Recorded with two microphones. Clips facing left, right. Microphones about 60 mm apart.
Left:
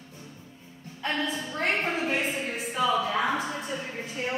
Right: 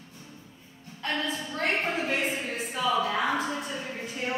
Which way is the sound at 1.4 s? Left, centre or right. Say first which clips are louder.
Left 1 dB; centre.